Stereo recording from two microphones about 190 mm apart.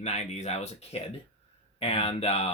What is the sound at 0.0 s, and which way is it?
Speech, 35° left (ahead or behind).